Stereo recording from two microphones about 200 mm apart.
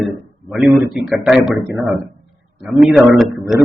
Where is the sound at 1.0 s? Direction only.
Centre (ahead or behind).